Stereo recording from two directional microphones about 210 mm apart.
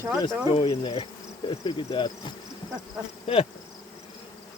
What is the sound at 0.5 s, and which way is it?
Insect, 25° left (ahead or behind).